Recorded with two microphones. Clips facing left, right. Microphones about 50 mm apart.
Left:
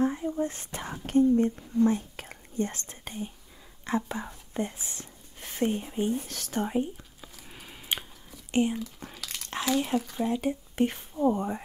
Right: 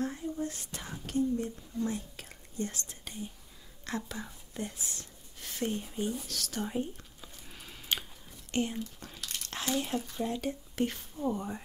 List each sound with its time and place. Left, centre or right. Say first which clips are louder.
0.0 s whispering: left 7 dB; left
3.8 s speech: left 7 dB; left
6.8 s a sound: left 5 dB; centre
10.1 s speech: left 5 dB; centre